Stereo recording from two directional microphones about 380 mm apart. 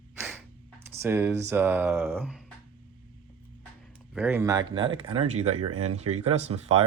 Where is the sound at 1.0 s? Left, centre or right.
Centre.